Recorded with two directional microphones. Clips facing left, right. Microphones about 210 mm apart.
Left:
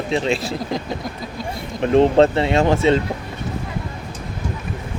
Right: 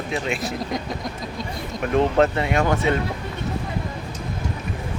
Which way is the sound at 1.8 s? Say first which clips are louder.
Left 5 dB; 30° left (ahead or behind).